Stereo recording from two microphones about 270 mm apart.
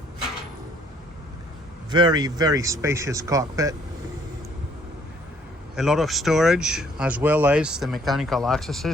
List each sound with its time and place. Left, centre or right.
1.9 s speech: centre
5.7 s speech: centre